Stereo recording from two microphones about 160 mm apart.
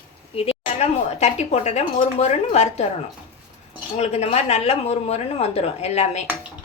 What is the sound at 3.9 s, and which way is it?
Speech, 40° left (ahead or behind).